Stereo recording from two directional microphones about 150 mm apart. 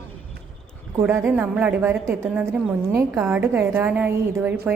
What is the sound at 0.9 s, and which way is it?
A woman's voice, 15° right (ahead or behind).